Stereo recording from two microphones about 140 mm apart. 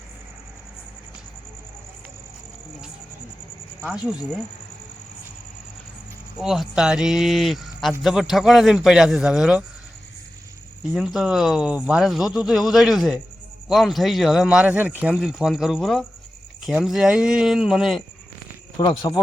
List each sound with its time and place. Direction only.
3.8 s speech: 5° right (ahead or behind)
6.3 s speech: centre (ahead or behind)
10.9 s speech: 5° right (ahead or behind)
18.8 s speech: 30° left (ahead or behind)